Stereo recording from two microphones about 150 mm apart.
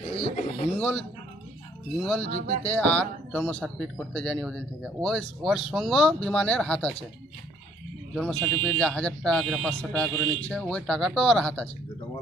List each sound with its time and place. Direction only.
0.1 s a sound: 45° left (ahead or behind)
0.7 s speech: 10° left (ahead or behind)
2.6 s speech: 10° left (ahead or behind)
8.1 s speech: 5° left (ahead or behind)